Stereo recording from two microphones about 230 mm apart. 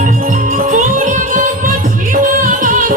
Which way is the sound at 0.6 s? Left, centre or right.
Right.